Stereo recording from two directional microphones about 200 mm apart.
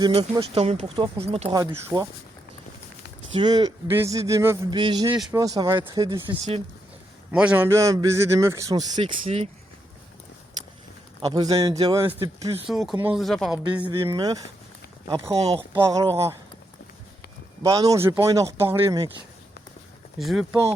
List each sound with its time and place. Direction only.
0.0 s a man's voice: 25° right (ahead or behind)
1.5 s a man's voice: 15° right (ahead or behind)
3.3 s a man's voice: 20° right (ahead or behind)
7.3 s a man's voice: 10° right (ahead or behind); by 9.5 s 25° right (ahead or behind)
11.2 s a man's voice: 25° right (ahead or behind)
12.6 s a man's voice: centre (ahead or behind); by 16.0 s 15° right (ahead or behind)
17.6 s a man's voice: 20° right (ahead or behind)
20.1 s speech: centre (ahead or behind)